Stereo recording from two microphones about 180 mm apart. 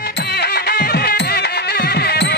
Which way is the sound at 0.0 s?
65° left (ahead or behind).